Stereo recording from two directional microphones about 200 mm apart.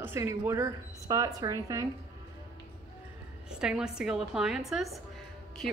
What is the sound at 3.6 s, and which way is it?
A woman's voice, 5° right (ahead or behind).